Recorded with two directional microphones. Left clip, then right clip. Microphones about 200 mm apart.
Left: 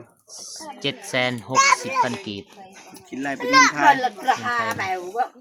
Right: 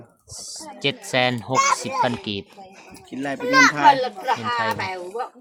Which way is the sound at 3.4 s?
25° right (ahead or behind).